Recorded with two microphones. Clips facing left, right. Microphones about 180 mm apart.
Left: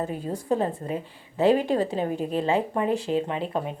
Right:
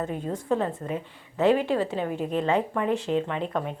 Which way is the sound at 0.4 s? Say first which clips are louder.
Left 2 dB; 35° left (ahead or behind).